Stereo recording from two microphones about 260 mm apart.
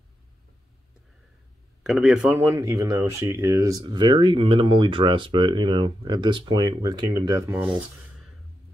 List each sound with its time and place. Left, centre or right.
1.8 s speech: centre
2.4 s speech: centre